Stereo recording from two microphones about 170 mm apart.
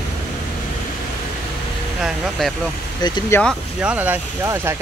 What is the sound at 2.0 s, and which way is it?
Speech, centre (ahead or behind).